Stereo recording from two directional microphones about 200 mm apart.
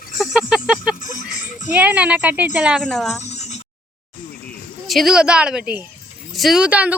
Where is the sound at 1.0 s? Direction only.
40° left (ahead or behind).